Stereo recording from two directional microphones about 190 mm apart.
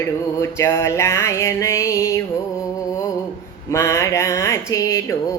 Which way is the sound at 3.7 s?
15° left (ahead or behind).